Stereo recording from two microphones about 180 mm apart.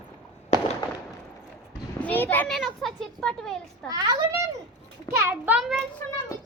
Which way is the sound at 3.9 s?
20° right (ahead or behind).